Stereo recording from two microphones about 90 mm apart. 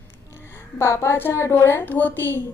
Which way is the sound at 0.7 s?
30° left (ahead or behind).